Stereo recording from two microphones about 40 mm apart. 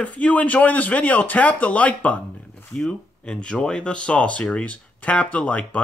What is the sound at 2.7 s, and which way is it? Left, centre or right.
Speech, centre.